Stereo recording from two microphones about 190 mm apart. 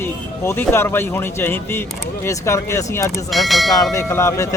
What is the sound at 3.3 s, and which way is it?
Speech, centre (ahead or behind).